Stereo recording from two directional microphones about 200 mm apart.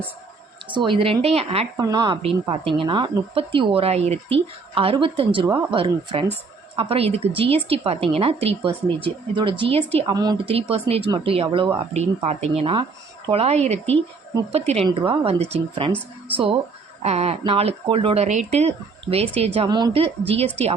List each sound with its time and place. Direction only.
0.7 s a woman's voice: 25° right (ahead or behind)
1.7 s a woman's voice: 20° right (ahead or behind)
17.0 s speech: 30° right (ahead or behind)
19.5 s a woman's voice: 20° right (ahead or behind)